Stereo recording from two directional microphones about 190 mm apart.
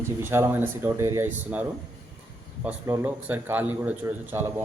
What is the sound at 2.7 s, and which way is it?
Speech, 10° right (ahead or behind).